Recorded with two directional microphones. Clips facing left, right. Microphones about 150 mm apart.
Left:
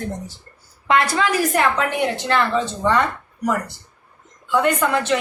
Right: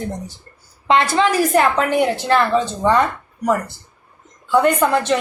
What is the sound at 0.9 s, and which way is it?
Speech, 25° right (ahead or behind).